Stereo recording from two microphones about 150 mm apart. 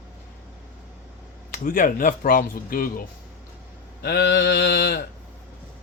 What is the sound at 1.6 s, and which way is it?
Speech, 65° left (ahead or behind).